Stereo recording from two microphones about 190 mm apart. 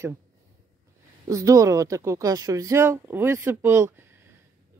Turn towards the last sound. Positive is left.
turn(degrees=-15)  # may be behind; listen again after turning